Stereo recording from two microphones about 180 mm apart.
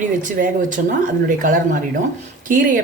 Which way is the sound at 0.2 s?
45° right (ahead or behind).